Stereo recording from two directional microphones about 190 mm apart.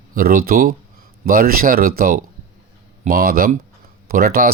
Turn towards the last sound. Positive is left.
turn(degrees=-50)  # may be behind; listen again after turning